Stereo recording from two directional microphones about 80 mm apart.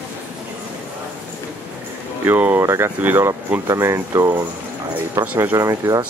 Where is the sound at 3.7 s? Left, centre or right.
Right.